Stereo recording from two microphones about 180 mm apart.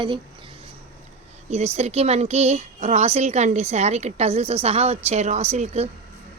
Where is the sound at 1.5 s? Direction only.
35° right (ahead or behind).